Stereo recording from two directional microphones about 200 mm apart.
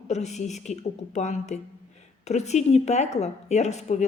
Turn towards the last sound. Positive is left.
turn(degrees=35)  # may be behind; listen again after turning